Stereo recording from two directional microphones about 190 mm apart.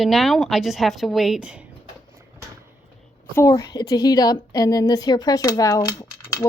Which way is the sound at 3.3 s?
15° left (ahead or behind).